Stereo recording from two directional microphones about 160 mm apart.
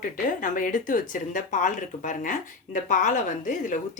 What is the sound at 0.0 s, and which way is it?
Speech, 55° left (ahead or behind).